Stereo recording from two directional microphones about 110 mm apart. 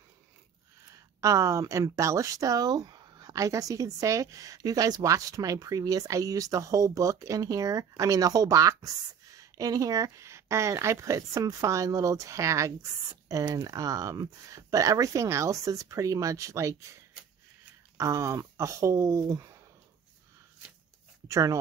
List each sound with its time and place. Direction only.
1.2 s speech: 30° right (ahead or behind)
17.9 s speech: 30° right (ahead or behind)
21.3 s speech: 30° right (ahead or behind)